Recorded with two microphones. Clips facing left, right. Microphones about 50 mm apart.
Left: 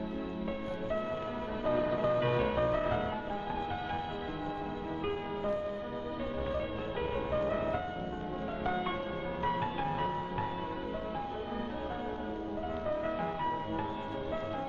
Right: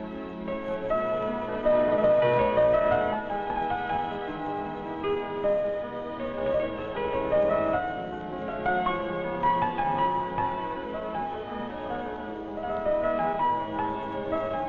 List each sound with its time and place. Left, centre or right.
0.7 s music: right
5.0 s music: right
12.6 s music: right